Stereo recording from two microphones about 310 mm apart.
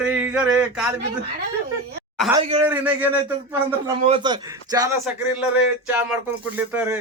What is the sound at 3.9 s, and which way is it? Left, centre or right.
Speech, centre.